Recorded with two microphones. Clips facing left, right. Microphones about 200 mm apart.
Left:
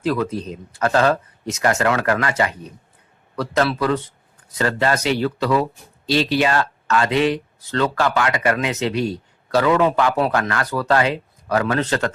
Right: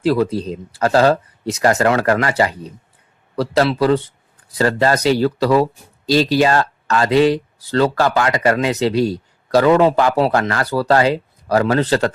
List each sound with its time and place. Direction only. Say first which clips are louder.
0.0 s speech: right 5 dB; 30° right (ahead or behind)